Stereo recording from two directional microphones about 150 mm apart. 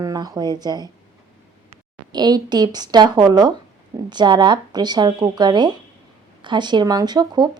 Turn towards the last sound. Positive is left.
turn(degrees=-30)  # may be behind; listen again after turning